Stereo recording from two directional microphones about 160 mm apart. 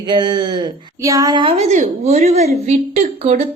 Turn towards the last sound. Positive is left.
turn(degrees=-40)  # may be behind; listen again after turning